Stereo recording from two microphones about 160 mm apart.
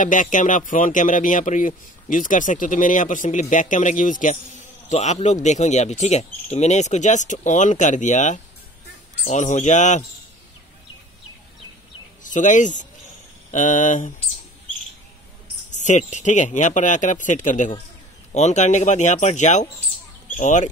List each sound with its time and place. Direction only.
0.0 s speech: 55° left (ahead or behind)
12.2 s speech: 55° left (ahead or behind)
15.7 s speech: 50° left (ahead or behind)